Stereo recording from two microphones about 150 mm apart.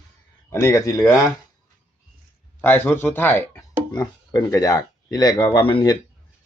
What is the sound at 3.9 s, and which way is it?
Speech, 30° left (ahead or behind).